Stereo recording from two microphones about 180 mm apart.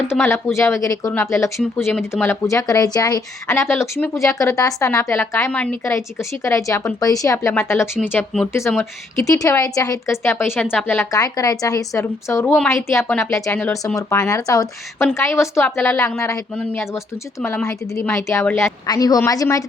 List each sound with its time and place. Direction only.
0.2 s speech: 15° left (ahead or behind)